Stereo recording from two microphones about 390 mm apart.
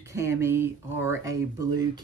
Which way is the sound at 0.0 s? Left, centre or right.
Centre.